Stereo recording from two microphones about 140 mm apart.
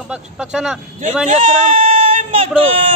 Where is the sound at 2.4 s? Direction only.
40° right (ahead or behind).